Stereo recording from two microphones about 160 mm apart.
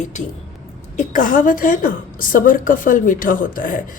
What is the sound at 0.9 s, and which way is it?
A woman's voice, 55° left (ahead or behind).